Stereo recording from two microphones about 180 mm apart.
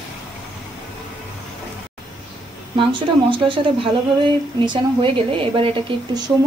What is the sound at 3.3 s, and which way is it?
Speech, 30° right (ahead or behind).